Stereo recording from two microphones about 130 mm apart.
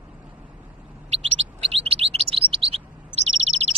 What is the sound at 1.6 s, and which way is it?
Chirp, 50° right (ahead or behind).